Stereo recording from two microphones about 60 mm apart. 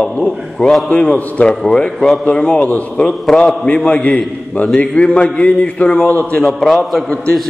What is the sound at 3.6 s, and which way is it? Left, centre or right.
A man's voice, centre.